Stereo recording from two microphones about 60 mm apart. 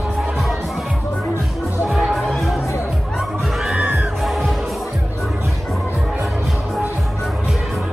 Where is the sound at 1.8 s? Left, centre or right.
Centre.